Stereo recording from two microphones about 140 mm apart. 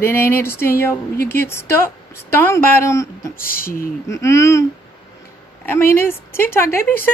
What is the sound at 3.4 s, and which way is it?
Speech, 90° left.